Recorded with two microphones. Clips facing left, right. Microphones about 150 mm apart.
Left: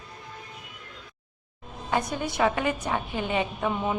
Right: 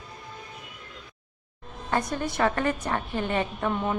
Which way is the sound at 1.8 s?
5° left (ahead or behind).